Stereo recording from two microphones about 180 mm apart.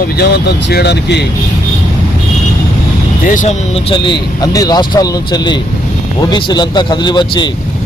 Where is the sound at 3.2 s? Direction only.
45° left (ahead or behind).